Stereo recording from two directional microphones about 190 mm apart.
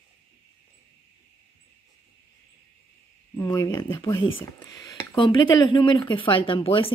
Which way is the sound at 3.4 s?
15° left (ahead or behind).